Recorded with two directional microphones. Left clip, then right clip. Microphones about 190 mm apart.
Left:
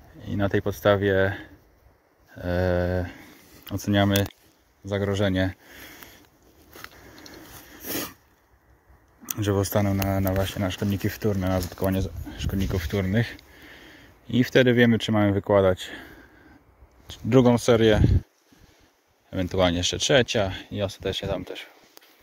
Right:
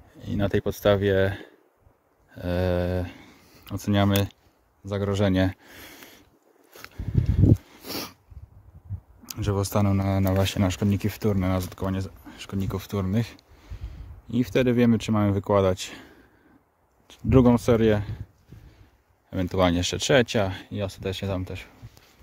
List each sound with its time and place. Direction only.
0.2 s speech: 55° right (ahead or behind)
2.3 s speech: 45° right (ahead or behind)
3.9 s speech: 25° right (ahead or behind)
5.1 s speech: 55° right (ahead or behind)
7.8 s a sound: 15° right (ahead or behind)
9.7 s speech: 30° right (ahead or behind)
10.2 s speech: 50° right (ahead or behind)
10.8 s speech: 30° right (ahead or behind)
11.8 s speech: 5° right (ahead or behind); by 18.1 s 30° right (ahead or behind)
19.3 s speech: 35° right (ahead or behind)